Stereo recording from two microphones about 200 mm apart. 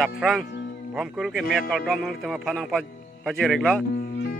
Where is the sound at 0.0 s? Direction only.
Centre (ahead or behind).